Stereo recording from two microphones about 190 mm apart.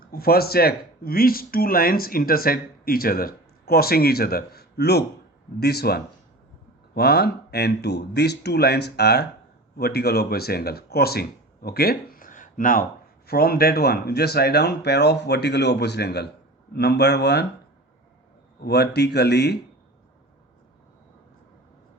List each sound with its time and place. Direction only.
0.1 s speech: 55° left (ahead or behind)
18.6 s speech: 60° left (ahead or behind)